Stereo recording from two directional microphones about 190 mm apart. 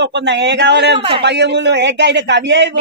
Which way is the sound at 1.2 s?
65° right (ahead or behind).